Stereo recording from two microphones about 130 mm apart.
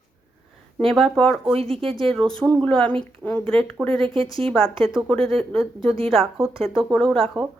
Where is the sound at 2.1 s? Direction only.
5° left (ahead or behind).